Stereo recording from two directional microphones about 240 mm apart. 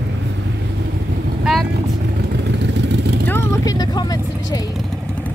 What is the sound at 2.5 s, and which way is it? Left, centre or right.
Vehicle, right.